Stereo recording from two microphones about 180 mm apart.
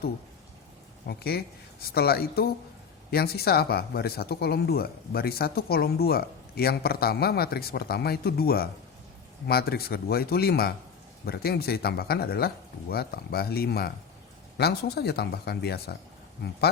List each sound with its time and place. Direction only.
1.0 s speech: 60° left (ahead or behind)